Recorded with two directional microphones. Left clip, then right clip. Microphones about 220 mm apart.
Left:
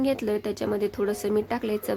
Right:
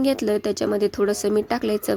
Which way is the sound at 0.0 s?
25° right (ahead or behind).